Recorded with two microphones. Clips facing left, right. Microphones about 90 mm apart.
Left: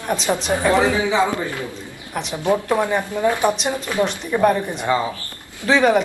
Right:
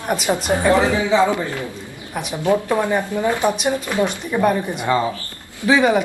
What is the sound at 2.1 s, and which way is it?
Speech, 5° right (ahead or behind).